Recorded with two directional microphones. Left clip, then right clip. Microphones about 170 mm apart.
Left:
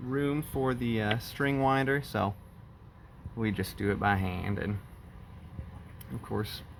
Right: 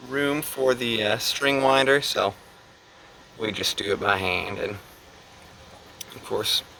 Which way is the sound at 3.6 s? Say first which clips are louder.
Right 8 dB; 40° right (ahead or behind).